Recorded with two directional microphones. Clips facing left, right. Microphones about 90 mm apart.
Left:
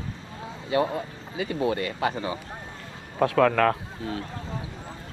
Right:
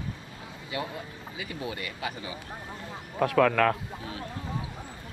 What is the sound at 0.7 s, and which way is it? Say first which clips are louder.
Speech: left 10 dB; 35° left (ahead or behind).